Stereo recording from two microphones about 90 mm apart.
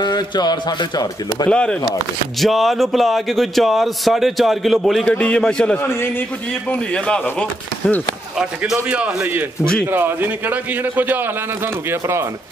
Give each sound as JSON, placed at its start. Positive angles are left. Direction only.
{"t": 0.0, "sound": "a man's voice", "side_deg": 55}
{"t": 1.5, "sound": "a man's voice", "side_deg": 10}
{"t": 2.4, "sound": "speech", "side_deg": 0}
{"t": 5.0, "sound": "a man's voice", "side_deg": 15}
{"t": 5.8, "sound": "a man's voice", "side_deg": 25}
{"t": 6.7, "sound": "a man's voice", "side_deg": 10}
{"t": 8.4, "sound": "a man's voice", "side_deg": -10}